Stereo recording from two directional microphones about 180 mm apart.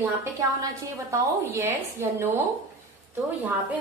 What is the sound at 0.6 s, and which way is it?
A woman's voice, 15° right (ahead or behind).